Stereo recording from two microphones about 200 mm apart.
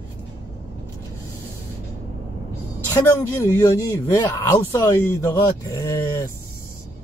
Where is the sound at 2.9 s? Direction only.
15° left (ahead or behind).